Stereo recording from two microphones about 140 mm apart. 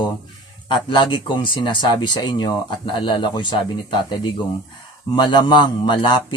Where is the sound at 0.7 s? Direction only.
35° left (ahead or behind).